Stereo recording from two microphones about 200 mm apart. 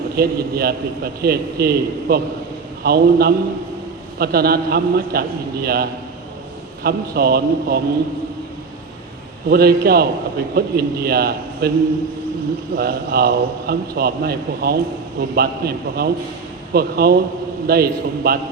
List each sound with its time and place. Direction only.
0.2 s a man's voice: 50° right (ahead or behind)
9.5 s a man's voice: 50° right (ahead or behind)
12.7 s a man's voice: 50° right (ahead or behind)